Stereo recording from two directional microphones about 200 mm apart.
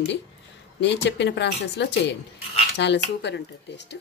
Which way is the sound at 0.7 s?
60° left (ahead or behind).